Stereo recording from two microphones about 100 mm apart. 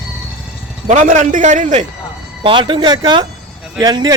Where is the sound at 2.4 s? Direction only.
55° right (ahead or behind).